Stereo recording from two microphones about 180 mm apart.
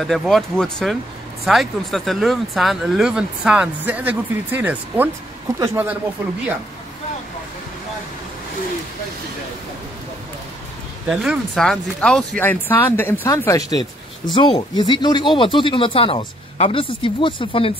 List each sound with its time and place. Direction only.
0.0 s speech: centre (ahead or behind)
11.1 s speech: centre (ahead or behind); by 17.7 s 30° left (ahead or behind)